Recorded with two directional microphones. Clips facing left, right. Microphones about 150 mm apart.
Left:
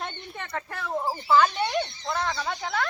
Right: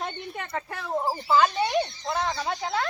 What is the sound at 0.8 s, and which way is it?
Speech, 20° right (ahead or behind).